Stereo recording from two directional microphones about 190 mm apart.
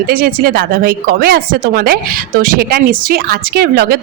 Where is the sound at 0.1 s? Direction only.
50° right (ahead or behind).